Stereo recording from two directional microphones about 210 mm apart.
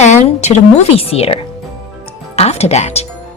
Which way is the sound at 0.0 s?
35° left (ahead or behind).